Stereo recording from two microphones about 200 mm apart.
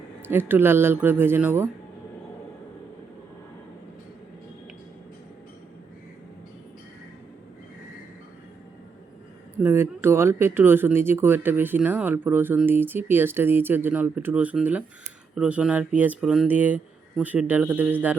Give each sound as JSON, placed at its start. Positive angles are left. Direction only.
{"t": 0.2, "sound": "speech", "side_deg": -10}
{"t": 9.6, "sound": "speech", "side_deg": -10}